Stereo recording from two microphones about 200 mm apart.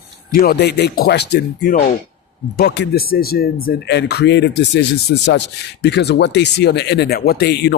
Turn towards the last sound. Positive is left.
turn(degrees=55)  # may be behind; listen again after turning